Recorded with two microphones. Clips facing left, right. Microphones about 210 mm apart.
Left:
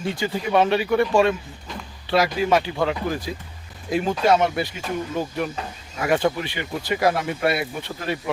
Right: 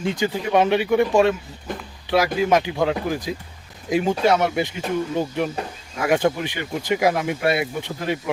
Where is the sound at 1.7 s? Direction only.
55° right (ahead or behind).